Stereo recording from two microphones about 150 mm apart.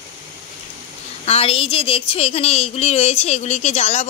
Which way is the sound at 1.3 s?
40° left (ahead or behind).